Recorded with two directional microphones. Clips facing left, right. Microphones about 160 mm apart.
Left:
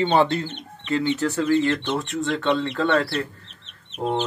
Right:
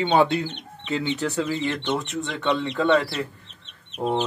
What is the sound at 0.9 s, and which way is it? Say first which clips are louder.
Speech: left 3 dB; 20° right (ahead or behind).